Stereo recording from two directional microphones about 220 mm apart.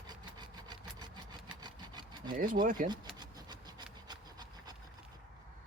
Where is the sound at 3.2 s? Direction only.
20° right (ahead or behind).